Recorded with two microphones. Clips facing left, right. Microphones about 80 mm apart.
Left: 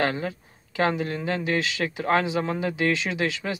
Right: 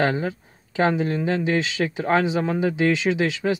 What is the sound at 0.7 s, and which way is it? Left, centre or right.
Speech, right.